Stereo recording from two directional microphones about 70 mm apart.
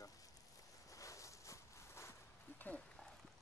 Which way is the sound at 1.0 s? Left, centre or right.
Left.